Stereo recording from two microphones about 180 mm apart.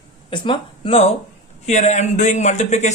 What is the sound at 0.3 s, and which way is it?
Speech, 30° left (ahead or behind).